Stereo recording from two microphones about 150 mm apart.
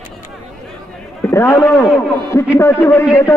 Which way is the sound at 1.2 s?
15° left (ahead or behind).